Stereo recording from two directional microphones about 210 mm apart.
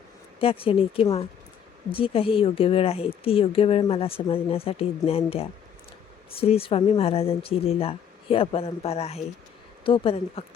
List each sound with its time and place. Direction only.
0.3 s speech: 25° left (ahead or behind)